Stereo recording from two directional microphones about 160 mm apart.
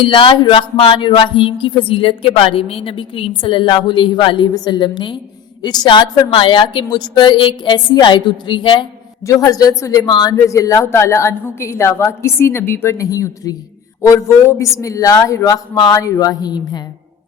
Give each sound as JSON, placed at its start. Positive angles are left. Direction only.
{"t": 0.0, "sound": "speech", "side_deg": 30}